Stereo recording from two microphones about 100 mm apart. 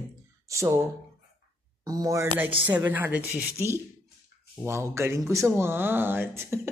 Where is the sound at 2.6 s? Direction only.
15° right (ahead or behind).